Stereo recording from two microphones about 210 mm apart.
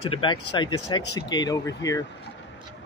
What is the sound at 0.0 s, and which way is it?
Speech, 25° left (ahead or behind).